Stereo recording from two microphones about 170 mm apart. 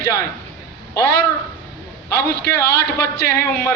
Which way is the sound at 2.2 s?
70° left (ahead or behind).